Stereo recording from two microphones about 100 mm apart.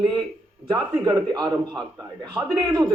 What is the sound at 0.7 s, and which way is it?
Speech, 45° right (ahead or behind).